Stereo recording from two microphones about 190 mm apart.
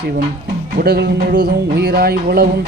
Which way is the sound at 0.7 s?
55° right (ahead or behind).